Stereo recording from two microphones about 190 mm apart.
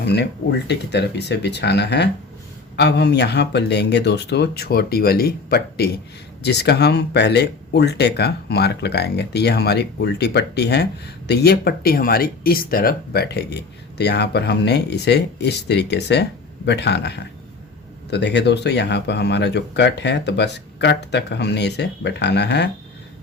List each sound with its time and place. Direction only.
0.0 s speech: 60° left (ahead or behind)